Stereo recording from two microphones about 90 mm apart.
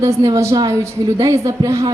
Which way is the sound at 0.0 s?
35° right (ahead or behind).